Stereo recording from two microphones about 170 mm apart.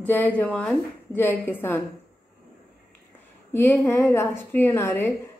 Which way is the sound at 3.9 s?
15° left (ahead or behind).